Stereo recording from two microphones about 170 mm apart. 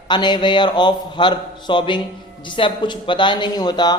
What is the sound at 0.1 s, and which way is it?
A man's voice, 25° left (ahead or behind).